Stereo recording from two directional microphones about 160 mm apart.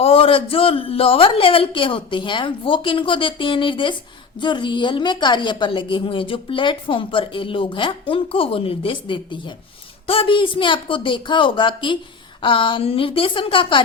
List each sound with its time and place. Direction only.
0.0 s a woman's voice: 35° left (ahead or behind)